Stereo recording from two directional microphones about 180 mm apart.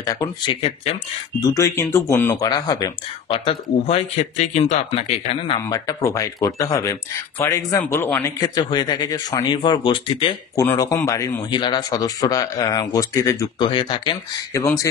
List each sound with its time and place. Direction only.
0.0 s speech: 20° left (ahead or behind)
0.6 s speech: 35° left (ahead or behind)
1.4 s speech: 15° left (ahead or behind)
3.3 s speech: 35° left (ahead or behind)
5.7 s speech: 15° left (ahead or behind)
10.6 s speech: 15° left (ahead or behind)